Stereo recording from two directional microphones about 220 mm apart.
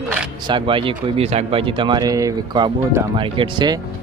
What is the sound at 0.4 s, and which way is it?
Speech, 20° right (ahead or behind).